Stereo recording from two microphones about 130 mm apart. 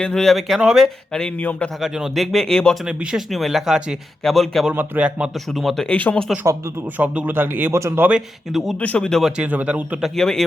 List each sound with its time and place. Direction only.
0.0 s speech: 5° left (ahead or behind)
1.8 s speech: centre (ahead or behind)
2.8 s speech: 5° right (ahead or behind)
4.7 s speech: 10° right (ahead or behind); by 6.2 s 10° left (ahead or behind)
6.5 s speech: 25° right (ahead or behind)
7.0 s speech: 10° right (ahead or behind)
8.8 s speech: 10° left (ahead or behind)
9.4 s speech: 10° right (ahead or behind)
10.2 s speech: 5° left (ahead or behind)